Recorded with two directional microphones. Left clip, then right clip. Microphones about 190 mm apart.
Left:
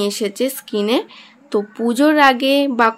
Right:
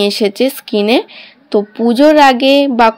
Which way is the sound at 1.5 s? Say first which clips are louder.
Right 6 dB; 15° right (ahead or behind).